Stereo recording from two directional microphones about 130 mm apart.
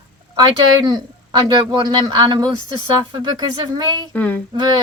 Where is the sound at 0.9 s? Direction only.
35° right (ahead or behind).